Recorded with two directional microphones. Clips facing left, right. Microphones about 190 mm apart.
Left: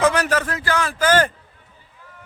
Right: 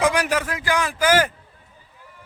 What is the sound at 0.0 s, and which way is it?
A man's voice, 10° right (ahead or behind).